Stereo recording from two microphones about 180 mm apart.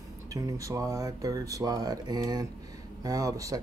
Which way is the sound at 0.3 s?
20° right (ahead or behind).